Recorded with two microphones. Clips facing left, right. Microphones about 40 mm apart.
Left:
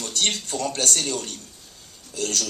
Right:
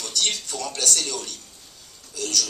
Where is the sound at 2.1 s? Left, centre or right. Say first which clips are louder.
Even; left.